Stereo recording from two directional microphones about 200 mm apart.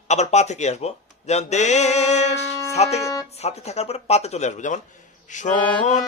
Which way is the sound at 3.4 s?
35° left (ahead or behind).